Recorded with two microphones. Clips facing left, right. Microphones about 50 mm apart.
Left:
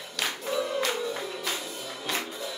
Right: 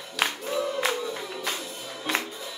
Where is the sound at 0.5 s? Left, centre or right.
Centre.